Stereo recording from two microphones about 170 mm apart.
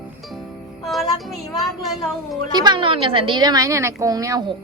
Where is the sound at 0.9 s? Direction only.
Centre (ahead or behind).